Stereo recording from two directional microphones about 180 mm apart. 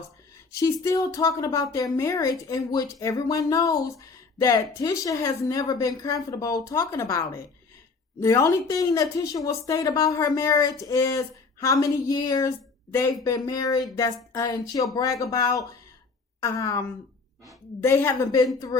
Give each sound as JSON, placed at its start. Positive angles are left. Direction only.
{"t": 0.5, "sound": "a woman's voice", "side_deg": 15}
{"t": 17.8, "sound": "a woman's voice", "side_deg": 15}